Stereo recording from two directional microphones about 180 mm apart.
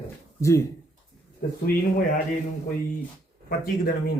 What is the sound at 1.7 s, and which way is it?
Speech, 55° left (ahead or behind).